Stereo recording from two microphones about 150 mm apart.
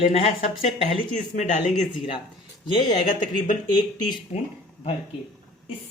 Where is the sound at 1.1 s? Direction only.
55° left (ahead or behind).